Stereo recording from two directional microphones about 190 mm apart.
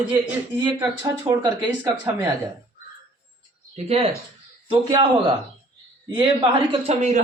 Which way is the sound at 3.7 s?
30° right (ahead or behind).